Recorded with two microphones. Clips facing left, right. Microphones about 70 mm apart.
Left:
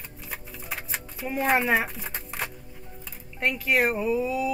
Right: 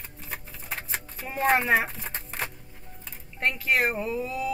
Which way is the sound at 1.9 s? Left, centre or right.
Centre.